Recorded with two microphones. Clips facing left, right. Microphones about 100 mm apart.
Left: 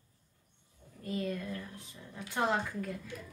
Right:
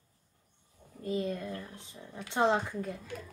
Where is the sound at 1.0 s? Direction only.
25° right (ahead or behind).